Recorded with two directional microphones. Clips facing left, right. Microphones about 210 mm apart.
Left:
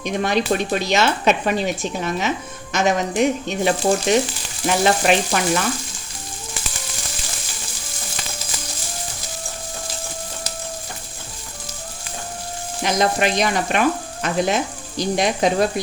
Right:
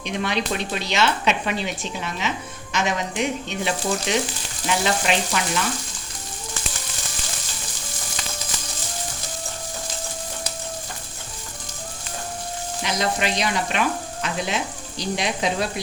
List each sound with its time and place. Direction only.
0.0 s sizzle: 45° left (ahead or behind)
12.8 s sizzle: 50° left (ahead or behind)